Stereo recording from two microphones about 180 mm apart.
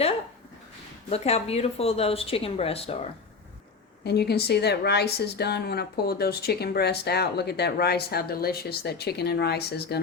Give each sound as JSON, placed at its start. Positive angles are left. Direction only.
{"t": 1.1, "sound": "speech", "side_deg": 35}
{"t": 4.0, "sound": "a woman's voice", "side_deg": 65}